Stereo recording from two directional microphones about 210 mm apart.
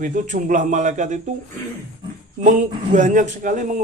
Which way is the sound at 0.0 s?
35° right (ahead or behind).